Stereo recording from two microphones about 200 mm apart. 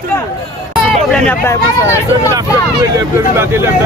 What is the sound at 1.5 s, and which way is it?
Speech, 15° left (ahead or behind).